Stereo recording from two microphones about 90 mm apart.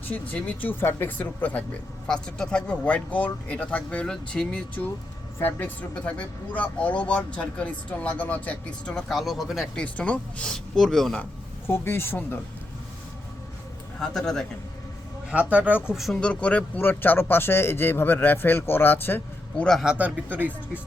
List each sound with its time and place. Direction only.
0.0 s speech: 15° left (ahead or behind)
8.9 s speech: 5° left (ahead or behind)
9.7 s speech: 15° left (ahead or behind)
11.6 s speech: 25° left (ahead or behind)
14.0 s speech: 5° left (ahead or behind)
15.3 s speech: 15° right (ahead or behind)
16.1 s speech: 15° left (ahead or behind)
19.8 s speech: 10° right (ahead or behind)